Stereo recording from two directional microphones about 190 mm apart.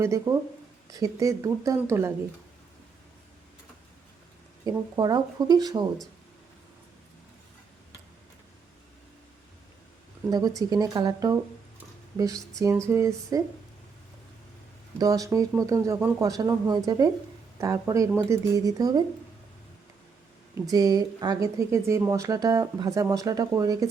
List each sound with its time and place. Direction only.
0.0 s speech: 15° right (ahead or behind)
4.6 s speech: 20° right (ahead or behind)
10.2 s speech: 20° right (ahead or behind)
14.9 s speech: 20° right (ahead or behind)
20.6 s speech: 20° right (ahead or behind)